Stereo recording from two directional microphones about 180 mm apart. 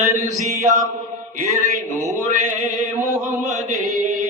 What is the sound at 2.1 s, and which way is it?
Chant, 40° right (ahead or behind).